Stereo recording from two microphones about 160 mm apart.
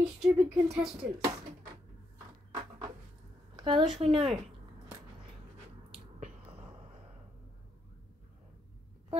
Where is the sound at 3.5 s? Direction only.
30° right (ahead or behind).